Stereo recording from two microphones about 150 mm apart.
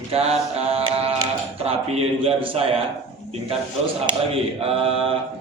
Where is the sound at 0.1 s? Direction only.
40° right (ahead or behind).